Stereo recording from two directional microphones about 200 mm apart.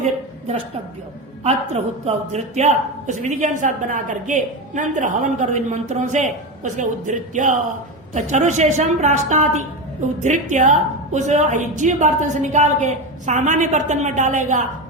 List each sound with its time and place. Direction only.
0.0 s a woman's voice: 35° right (ahead or behind)